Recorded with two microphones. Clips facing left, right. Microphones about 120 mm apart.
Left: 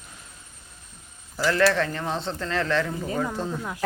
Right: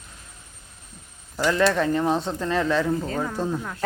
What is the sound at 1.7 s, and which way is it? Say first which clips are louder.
Speech: right 5 dB; 15° right (ahead or behind).